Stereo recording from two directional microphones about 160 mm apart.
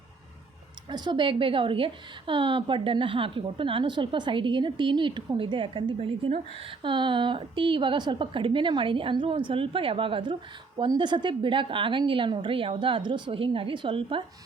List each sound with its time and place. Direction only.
0.9 s a woman's voice: 30° right (ahead or behind)